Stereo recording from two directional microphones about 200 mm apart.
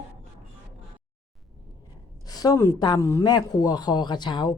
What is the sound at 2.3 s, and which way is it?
Speech, 20° left (ahead or behind).